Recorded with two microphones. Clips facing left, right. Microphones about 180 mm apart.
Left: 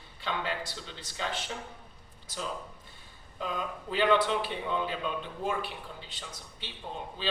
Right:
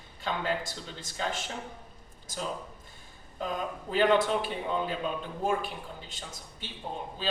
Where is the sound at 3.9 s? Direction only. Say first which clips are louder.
Right 2 dB; 45° right (ahead or behind).